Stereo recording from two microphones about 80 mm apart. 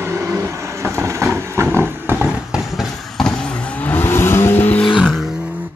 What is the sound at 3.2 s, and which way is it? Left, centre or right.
Vehicle, centre.